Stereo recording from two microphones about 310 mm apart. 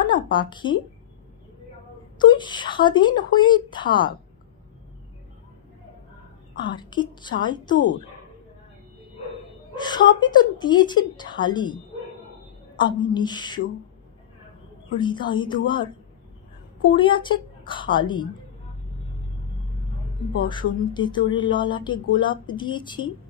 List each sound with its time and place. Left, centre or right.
0.0 s speech: centre
2.1 s speech: centre
6.5 s speech: centre
9.8 s speech: centre
12.7 s speech: centre
15.0 s speech: centre
16.9 s speech: centre
20.4 s speech: centre